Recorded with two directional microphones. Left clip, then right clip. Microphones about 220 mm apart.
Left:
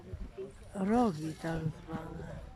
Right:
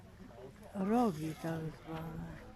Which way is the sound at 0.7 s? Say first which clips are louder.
Left 3 dB; 5° right (ahead or behind).